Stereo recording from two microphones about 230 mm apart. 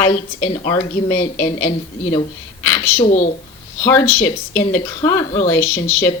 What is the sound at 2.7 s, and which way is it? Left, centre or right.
Speech, centre.